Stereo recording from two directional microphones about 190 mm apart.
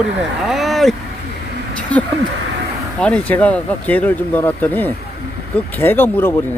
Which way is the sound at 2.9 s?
5° left (ahead or behind).